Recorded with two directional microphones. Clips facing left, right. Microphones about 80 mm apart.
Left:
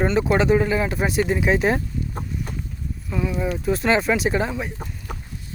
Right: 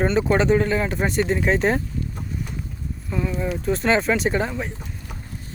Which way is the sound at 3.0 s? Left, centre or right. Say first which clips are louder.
Left 1 dB; centre.